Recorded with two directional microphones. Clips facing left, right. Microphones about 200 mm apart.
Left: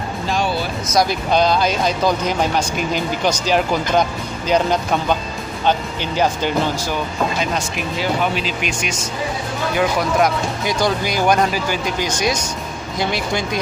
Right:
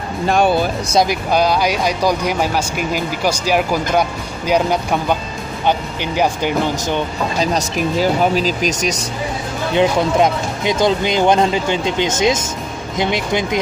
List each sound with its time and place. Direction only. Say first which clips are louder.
0.3 s speech: right 7 dB; 55° right (ahead or behind)
1.0 s speech: right 1 dB; 10° right (ahead or behind)
7.3 s speech: right 4 dB; 40° right (ahead or behind)
9.8 s speech: right 4 dB; 25° right (ahead or behind)